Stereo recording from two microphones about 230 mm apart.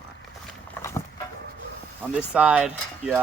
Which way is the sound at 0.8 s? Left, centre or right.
Centre.